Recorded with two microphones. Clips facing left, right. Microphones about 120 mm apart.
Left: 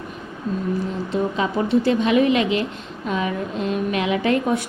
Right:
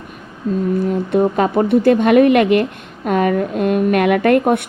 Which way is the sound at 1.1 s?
55° right (ahead or behind).